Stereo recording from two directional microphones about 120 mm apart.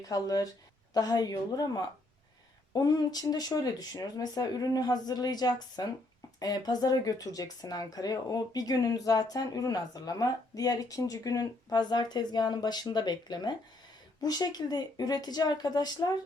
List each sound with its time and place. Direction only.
0.1 s speech: 30° left (ahead or behind)